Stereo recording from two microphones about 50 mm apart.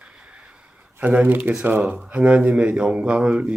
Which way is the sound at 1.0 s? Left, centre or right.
Right.